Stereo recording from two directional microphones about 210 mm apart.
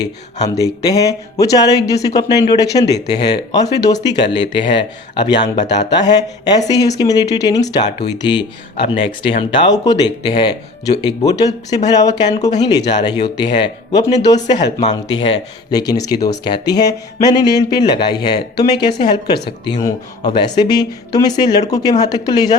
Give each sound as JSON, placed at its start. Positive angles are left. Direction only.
{"t": 0.4, "sound": "speech", "side_deg": 15}